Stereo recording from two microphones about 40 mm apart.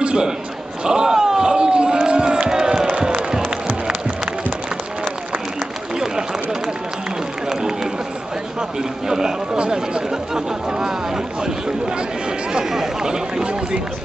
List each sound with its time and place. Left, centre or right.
0.0 s a sound: right
2.5 s music: centre
7.4 s run: centre
8.5 s a sound: centre
9.6 s speech: centre
12.7 s speech: centre